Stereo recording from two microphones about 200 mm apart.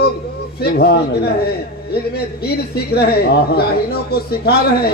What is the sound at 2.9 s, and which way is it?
A man's voice, 55° left (ahead or behind).